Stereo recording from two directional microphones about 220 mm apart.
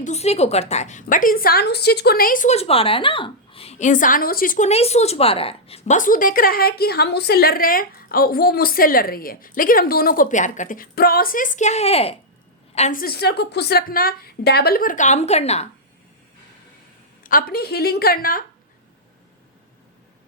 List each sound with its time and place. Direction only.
0.0 s a woman's voice: 30° left (ahead or behind)
17.2 s a woman's voice: 40° left (ahead or behind)